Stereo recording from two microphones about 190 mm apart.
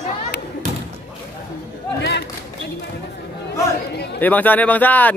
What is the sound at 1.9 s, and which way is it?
Speech, 65° left (ahead or behind).